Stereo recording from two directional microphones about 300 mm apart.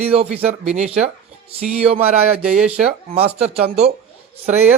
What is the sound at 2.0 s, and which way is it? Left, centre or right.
Music, centre.